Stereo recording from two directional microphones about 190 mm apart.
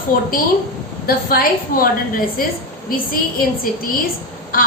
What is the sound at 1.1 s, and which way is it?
Speech, 50° left (ahead or behind).